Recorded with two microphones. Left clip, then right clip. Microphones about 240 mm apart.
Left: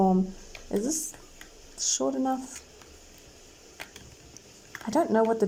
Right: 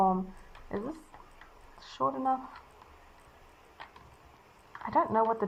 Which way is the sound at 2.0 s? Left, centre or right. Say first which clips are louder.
Right 1 dB; left.